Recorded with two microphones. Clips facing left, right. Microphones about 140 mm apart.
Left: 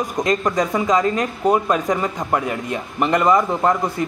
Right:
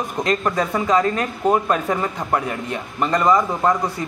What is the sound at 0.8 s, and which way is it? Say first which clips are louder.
Speech: even; 15° left (ahead or behind).